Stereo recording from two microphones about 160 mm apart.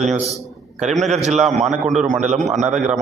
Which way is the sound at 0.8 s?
Centre (ahead or behind).